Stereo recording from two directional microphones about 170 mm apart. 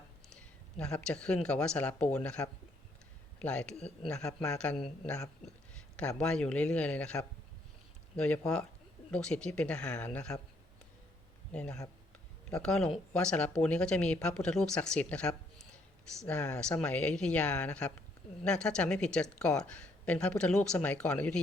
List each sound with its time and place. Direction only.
0.3 s speech: 5° left (ahead or behind)
3.8 s speech: 40° left (ahead or behind)
4.4 s speech: 5° left (ahead or behind)
11.5 s speech: 5° left (ahead or behind)